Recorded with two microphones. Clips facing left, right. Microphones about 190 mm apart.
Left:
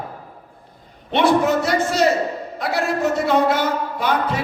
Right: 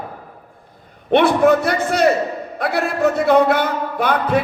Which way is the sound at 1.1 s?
55° right (ahead or behind).